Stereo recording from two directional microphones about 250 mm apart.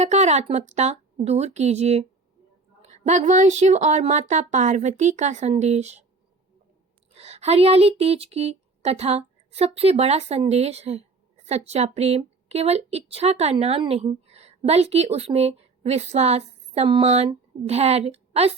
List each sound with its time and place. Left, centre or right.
0.0 s speech: right
7.1 s speech: right